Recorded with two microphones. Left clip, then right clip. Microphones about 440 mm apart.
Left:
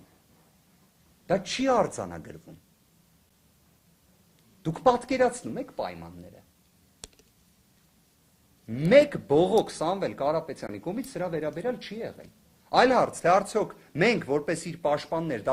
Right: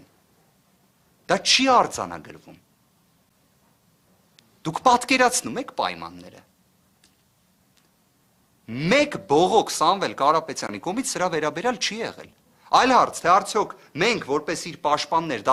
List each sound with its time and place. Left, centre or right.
1.3 s speech: right
5.0 s speech: right
8.6 s speech: right